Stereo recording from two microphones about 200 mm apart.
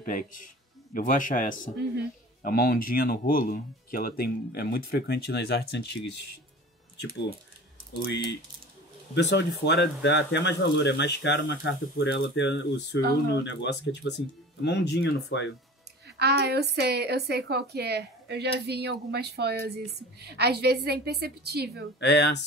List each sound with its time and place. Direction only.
0.0 s speech: 40° left (ahead or behind)
9.1 s speech: 60° left (ahead or behind)
16.2 s a woman's voice: 55° right (ahead or behind)
22.0 s speech: 60° left (ahead or behind)